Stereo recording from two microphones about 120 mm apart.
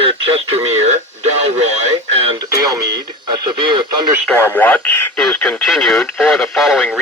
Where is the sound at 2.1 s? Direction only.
55° right (ahead or behind).